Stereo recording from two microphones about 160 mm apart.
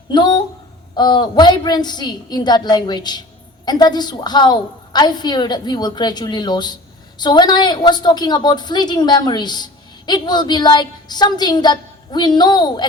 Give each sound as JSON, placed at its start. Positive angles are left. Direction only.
{"t": 0.1, "sound": "a woman's voice", "side_deg": 25}